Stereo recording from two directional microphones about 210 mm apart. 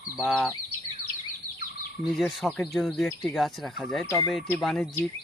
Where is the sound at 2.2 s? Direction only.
Centre (ahead or behind).